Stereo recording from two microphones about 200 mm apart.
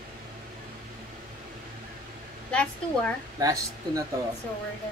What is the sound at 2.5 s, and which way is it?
Speech, 5° left (ahead or behind).